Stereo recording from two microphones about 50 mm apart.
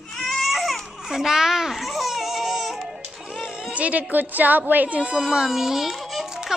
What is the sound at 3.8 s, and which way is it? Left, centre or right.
A woman's voice, right.